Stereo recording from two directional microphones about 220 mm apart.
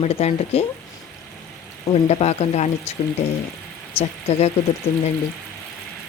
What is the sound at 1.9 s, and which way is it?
Speech, 30° left (ahead or behind).